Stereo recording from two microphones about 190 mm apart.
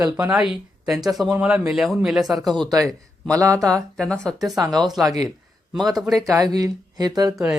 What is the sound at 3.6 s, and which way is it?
Speech, 5° left (ahead or behind).